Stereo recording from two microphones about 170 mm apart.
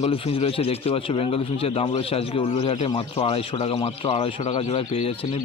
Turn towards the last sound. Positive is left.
turn(degrees=35)  # may be behind; listen again after turning